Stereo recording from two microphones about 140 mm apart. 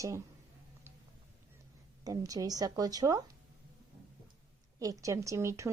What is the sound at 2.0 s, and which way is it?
Speech, 25° right (ahead or behind).